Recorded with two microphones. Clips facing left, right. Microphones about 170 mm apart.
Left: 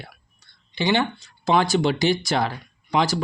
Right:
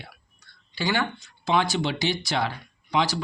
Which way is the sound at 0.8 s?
20° left (ahead or behind).